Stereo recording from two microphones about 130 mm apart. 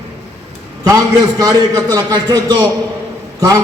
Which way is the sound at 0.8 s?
30° right (ahead or behind).